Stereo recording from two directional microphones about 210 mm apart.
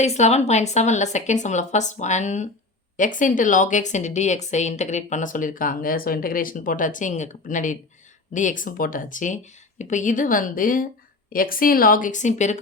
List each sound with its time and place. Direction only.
0.0 s a woman's voice: 30° left (ahead or behind)